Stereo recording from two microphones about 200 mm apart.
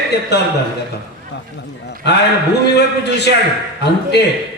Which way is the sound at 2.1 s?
55° left (ahead or behind).